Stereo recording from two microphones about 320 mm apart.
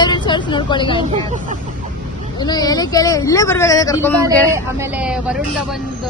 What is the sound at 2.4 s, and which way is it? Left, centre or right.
A man's voice, centre.